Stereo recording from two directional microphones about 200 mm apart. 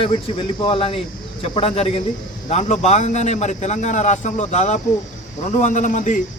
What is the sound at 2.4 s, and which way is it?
A man's voice, 35° left (ahead or behind).